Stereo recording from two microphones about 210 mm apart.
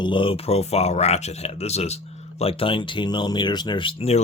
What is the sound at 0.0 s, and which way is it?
Speech, 25° left (ahead or behind).